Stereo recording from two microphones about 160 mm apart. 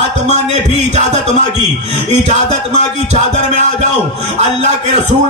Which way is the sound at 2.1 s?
45° right (ahead or behind).